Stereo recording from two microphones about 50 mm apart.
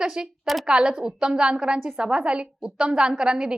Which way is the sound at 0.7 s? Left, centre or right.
Centre.